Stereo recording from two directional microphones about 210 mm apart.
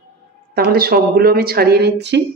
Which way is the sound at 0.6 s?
45° right (ahead or behind).